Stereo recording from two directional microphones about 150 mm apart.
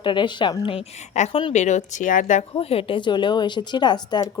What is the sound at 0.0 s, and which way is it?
Speech, 30° left (ahead or behind).